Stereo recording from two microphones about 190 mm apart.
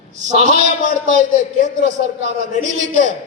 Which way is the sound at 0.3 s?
40° right (ahead or behind).